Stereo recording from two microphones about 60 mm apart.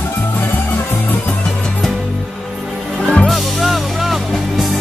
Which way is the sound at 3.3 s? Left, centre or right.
Centre.